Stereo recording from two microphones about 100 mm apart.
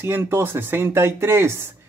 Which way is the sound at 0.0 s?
25° right (ahead or behind).